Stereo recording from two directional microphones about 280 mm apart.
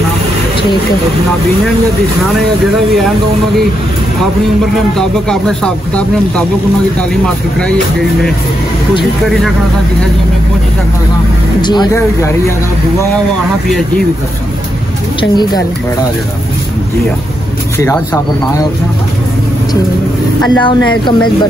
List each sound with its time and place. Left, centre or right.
4.9 s speech: centre
11.6 s speech: centre
13.7 s speech: centre
15.1 s speech: centre
17.7 s speech: centre
20.4 s speech: centre